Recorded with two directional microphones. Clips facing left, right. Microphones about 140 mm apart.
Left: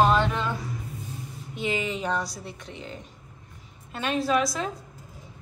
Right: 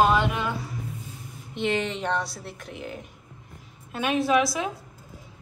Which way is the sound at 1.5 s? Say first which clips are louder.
Right 2 dB; centre (ahead or behind).